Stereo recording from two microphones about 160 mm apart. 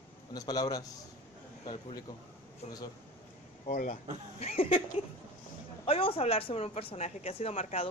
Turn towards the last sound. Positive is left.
turn(degrees=45)  # may be behind; listen again after turning